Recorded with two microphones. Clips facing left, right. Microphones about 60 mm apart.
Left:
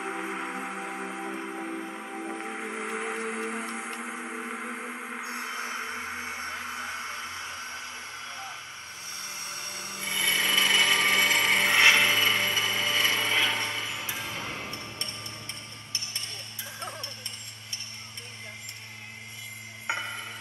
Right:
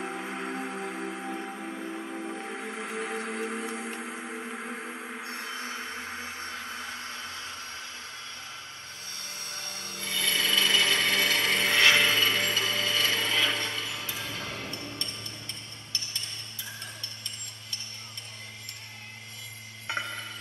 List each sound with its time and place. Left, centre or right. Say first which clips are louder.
0.0 s music: left 1 dB; centre
9.4 s a sound: left 1 dB; centre
19.9 s music: left 1 dB; left